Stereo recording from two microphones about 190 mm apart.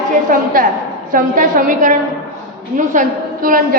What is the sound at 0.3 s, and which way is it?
A woman's voice, 45° right (ahead or behind).